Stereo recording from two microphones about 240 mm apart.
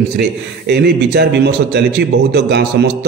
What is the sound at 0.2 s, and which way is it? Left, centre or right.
Speech, right.